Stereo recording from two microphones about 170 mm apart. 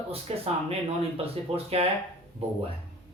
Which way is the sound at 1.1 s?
35° right (ahead or behind).